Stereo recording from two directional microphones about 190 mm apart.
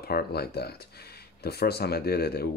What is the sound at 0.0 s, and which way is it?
Speech, 55° left (ahead or behind).